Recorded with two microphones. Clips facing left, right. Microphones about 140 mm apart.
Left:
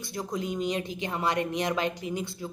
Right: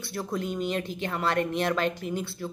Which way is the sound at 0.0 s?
15° left (ahead or behind).